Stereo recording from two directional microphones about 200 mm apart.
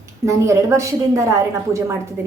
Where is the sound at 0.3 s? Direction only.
15° right (ahead or behind).